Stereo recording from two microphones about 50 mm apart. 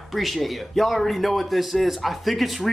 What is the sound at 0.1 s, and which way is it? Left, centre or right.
Speech, centre.